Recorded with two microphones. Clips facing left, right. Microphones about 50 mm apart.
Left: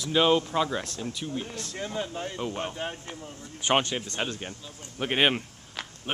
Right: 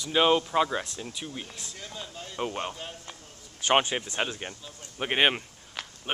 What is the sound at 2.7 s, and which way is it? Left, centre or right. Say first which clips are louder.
Speech: left 6 dB; left.